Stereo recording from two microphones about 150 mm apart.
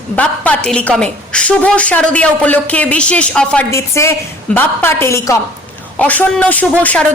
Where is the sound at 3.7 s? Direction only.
20° left (ahead or behind).